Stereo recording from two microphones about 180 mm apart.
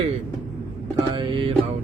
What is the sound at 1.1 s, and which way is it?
Speech, 30° right (ahead or behind).